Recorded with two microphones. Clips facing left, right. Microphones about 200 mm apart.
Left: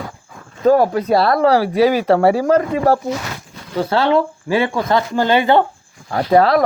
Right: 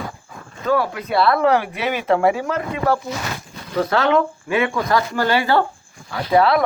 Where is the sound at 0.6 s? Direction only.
40° left (ahead or behind); by 5.6 s 20° left (ahead or behind).